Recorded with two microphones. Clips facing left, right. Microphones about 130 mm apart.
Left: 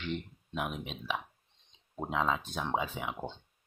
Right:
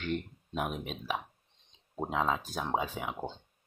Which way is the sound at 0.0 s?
50° right (ahead or behind).